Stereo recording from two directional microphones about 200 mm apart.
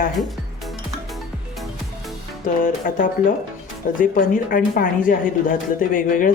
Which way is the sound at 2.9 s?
45° left (ahead or behind).